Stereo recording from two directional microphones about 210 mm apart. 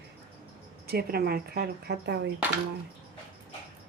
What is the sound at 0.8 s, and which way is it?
Speech, 45° right (ahead or behind).